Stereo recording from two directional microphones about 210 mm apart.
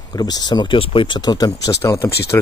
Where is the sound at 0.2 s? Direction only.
20° left (ahead or behind).